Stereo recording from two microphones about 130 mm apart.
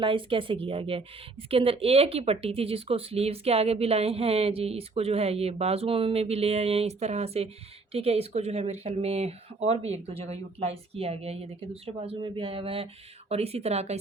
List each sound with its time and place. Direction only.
0.0 s a woman's voice: 40° right (ahead or behind)